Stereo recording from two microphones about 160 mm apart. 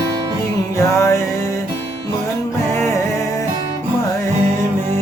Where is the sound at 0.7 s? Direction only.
20° left (ahead or behind).